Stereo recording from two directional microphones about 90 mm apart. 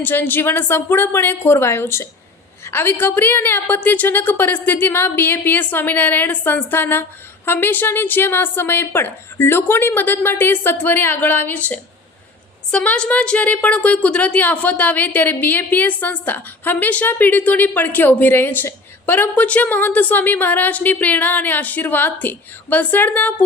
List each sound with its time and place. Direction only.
0.0 s a woman's voice: 20° left (ahead or behind)